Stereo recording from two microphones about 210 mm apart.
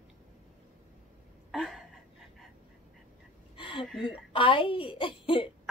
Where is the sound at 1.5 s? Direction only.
Centre (ahead or behind).